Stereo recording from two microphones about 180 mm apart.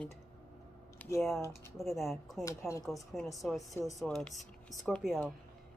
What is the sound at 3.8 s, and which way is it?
Speech, 15° left (ahead or behind).